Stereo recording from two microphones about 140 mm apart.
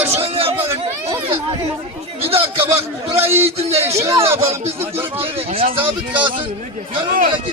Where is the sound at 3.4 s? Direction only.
45° right (ahead or behind).